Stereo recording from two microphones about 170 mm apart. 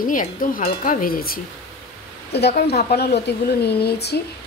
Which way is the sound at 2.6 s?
70° left (ahead or behind).